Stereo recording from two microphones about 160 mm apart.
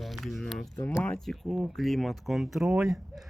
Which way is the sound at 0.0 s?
Centre (ahead or behind).